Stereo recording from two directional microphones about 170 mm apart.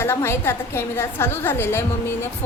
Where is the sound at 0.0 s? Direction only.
15° left (ahead or behind).